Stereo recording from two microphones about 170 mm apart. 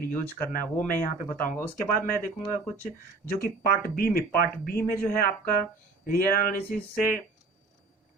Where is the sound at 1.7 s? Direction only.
55° left (ahead or behind).